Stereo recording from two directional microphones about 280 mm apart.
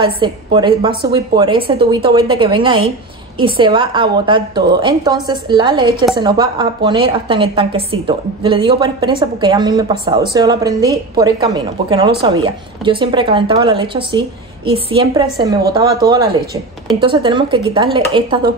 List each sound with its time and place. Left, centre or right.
0.0 s a woman's voice: centre